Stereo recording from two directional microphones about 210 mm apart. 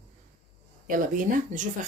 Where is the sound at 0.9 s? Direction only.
40° right (ahead or behind).